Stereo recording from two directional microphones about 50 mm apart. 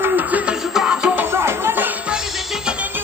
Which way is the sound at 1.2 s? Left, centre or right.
Right.